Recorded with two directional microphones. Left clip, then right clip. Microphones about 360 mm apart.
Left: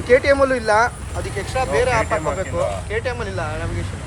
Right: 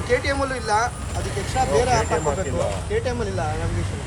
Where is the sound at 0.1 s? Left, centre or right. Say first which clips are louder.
Left 8 dB; centre.